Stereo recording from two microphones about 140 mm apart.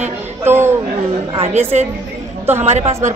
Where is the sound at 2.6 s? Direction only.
50° right (ahead or behind).